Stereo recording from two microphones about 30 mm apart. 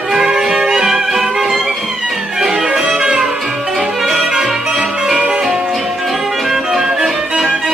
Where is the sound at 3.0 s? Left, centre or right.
Right.